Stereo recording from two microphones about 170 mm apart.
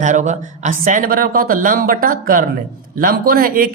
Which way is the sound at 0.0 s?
45° right (ahead or behind).